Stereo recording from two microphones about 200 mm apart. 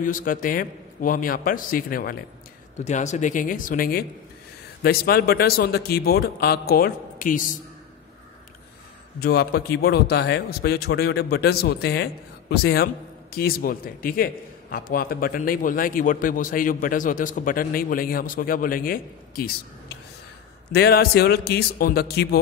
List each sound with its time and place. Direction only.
0.0 s a man's voice: 45° left (ahead or behind)
2.8 s a man's voice: 35° left (ahead or behind)
9.2 s a man's voice: 55° left (ahead or behind)
20.7 s a man's voice: 50° left (ahead or behind)